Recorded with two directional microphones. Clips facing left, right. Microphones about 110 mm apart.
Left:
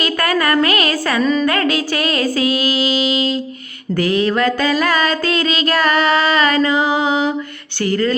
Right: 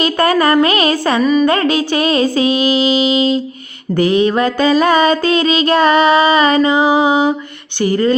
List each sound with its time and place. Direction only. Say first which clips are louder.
0.0 s music: right 5 dB; 25° right (ahead or behind)
1.2 s a woman's voice: right 4 dB; 10° right (ahead or behind)
1.5 s music: right 4 dB; 25° right (ahead or behind)